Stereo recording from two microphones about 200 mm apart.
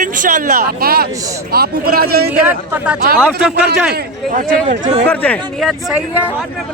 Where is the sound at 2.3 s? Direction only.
5° right (ahead or behind).